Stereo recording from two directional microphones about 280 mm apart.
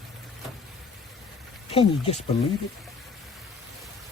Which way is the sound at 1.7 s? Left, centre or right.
Centre.